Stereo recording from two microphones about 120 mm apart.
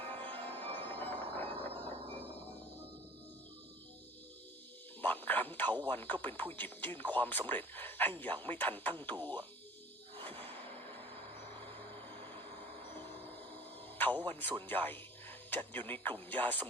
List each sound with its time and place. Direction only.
0.2 s music: 15° left (ahead or behind)
1.8 s mechanisms: 15° left (ahead or behind)
5.0 s a sound: 15° left (ahead or behind)
5.9 s speech: 15° left (ahead or behind)
14.0 s music: 15° left (ahead or behind)
14.7 s speech: 15° left (ahead or behind)